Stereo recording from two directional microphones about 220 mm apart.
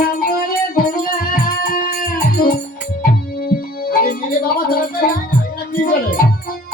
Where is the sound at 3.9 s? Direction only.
40° left (ahead or behind).